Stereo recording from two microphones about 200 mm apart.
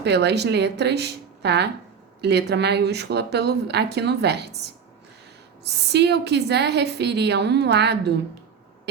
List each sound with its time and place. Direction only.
0.0 s speech: 55° right (ahead or behind)